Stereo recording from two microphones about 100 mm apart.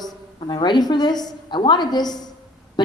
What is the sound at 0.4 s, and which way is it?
A woman's voice, 45° left (ahead or behind).